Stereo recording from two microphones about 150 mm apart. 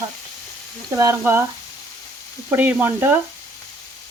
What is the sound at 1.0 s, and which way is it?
Speech, 20° right (ahead or behind).